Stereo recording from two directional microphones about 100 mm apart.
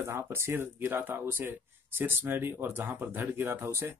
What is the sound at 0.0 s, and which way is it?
Speech, 25° right (ahead or behind).